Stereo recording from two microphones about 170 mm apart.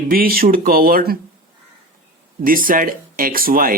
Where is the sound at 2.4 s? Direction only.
55° right (ahead or behind).